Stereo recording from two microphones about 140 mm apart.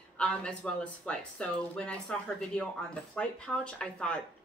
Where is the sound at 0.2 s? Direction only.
5° left (ahead or behind).